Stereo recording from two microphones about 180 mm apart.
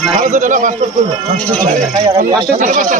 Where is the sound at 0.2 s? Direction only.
45° right (ahead or behind).